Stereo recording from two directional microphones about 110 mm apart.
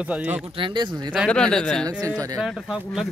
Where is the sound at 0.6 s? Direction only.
45° right (ahead or behind).